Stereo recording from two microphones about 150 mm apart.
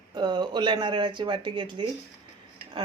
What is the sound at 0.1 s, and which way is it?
A woman's voice, 30° right (ahead or behind).